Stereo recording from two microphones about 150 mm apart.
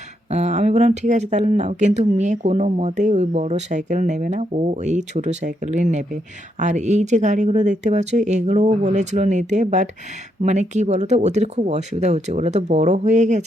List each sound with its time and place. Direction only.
0.3 s speech: 50° right (ahead or behind)